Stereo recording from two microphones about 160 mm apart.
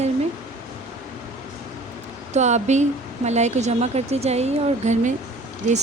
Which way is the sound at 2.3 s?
45° right (ahead or behind).